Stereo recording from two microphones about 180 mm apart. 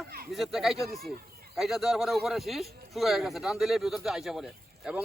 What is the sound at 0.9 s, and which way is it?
Speech, 55° right (ahead or behind).